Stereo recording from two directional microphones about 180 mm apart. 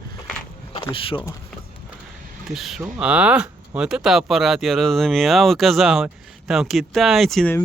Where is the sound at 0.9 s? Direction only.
30° left (ahead or behind).